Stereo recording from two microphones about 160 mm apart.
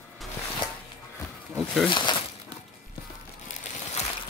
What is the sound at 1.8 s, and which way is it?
Speech, 30° left (ahead or behind).